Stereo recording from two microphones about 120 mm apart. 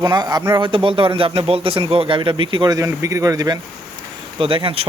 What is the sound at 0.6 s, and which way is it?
Speech, 45° right (ahead or behind).